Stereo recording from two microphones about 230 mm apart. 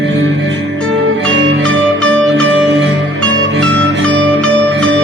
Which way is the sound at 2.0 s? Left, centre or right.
Centre.